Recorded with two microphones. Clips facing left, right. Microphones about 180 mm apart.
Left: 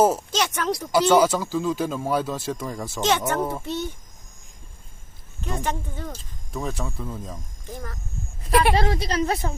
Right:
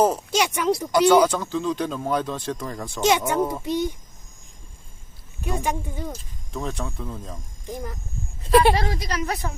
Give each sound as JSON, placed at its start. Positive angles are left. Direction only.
{"t": 0.3, "sound": "speech", "side_deg": -10}
{"t": 1.1, "sound": "speech", "side_deg": 5}
{"t": 3.0, "sound": "speech", "side_deg": -10}
{"t": 5.4, "sound": "speech", "side_deg": -10}
{"t": 6.5, "sound": "speech", "side_deg": 0}
{"t": 7.7, "sound": "speech", "side_deg": -15}
{"t": 8.7, "sound": "a woman's voice", "side_deg": 30}